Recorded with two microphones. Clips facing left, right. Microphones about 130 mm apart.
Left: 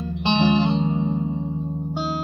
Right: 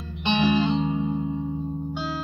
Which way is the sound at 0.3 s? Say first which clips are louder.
Left 2 dB; 30° left (ahead or behind).